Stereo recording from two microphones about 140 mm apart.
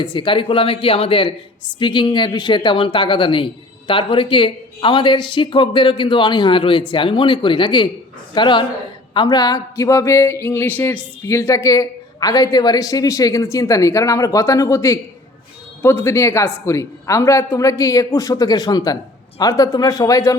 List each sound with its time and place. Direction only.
0.0 s speech: 35° left (ahead or behind)